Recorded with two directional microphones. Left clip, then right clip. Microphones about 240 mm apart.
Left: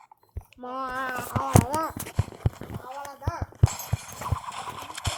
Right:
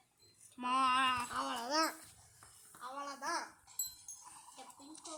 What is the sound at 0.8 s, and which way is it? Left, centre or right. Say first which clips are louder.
Speech: left 2 dB; right.